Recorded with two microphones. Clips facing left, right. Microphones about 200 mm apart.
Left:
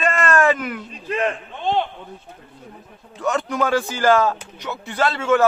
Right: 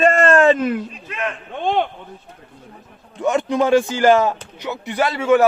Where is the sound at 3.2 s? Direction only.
15° right (ahead or behind).